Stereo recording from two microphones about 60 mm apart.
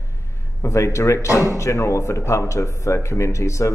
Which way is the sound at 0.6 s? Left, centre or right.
Left.